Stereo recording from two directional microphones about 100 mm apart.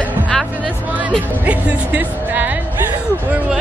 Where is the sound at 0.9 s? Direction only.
15° right (ahead or behind).